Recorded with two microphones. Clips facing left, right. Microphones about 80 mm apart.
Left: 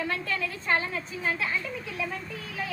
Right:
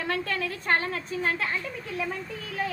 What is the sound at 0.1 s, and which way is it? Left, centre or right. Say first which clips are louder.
A woman's voice: right 2 dB; right.